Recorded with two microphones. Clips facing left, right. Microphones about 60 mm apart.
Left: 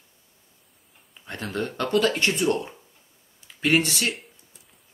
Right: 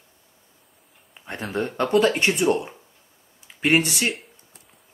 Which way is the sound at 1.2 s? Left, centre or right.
Right.